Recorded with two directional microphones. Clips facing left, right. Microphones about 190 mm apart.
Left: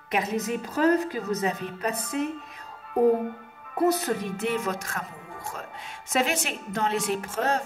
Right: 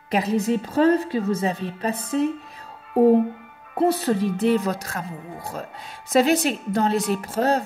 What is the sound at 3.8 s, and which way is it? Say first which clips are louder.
Music: right 4 dB; 30° right (ahead or behind).